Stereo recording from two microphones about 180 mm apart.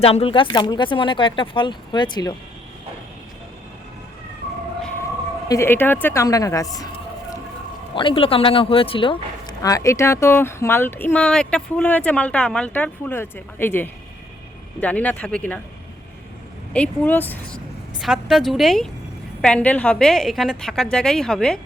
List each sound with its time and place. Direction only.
0.0 s speech: 35° left (ahead or behind)
5.5 s speech: 15° left (ahead or behind)
7.9 s speech: 30° left (ahead or behind); by 15.6 s 5° left (ahead or behind)
16.7 s speech: 5° left (ahead or behind)
18.0 s a woman's voice: centre (ahead or behind)